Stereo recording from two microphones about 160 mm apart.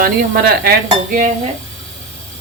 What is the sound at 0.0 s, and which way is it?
Speech, 70° right (ahead or behind).